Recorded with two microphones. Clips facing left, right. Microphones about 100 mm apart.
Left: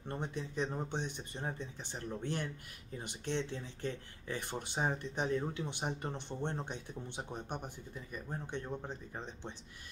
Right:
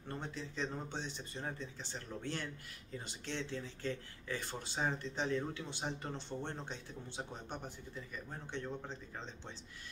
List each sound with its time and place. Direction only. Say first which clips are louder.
0.4 s speech: left 4 dB; 20° left (ahead or behind)